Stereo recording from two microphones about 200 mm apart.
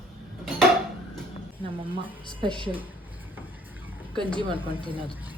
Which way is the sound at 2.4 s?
25° right (ahead or behind).